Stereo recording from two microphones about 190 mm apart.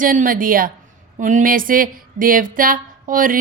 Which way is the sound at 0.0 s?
45° right (ahead or behind).